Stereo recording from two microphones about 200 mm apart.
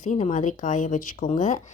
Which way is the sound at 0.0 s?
35° left (ahead or behind).